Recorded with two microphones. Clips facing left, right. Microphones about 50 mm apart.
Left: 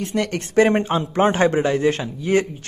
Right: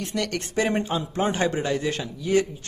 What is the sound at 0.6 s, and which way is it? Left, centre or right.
Speech, left.